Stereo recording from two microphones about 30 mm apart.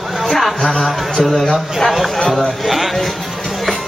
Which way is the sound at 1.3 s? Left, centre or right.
Centre.